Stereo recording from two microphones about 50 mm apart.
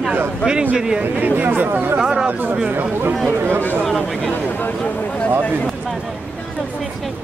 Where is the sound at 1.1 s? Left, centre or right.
Right.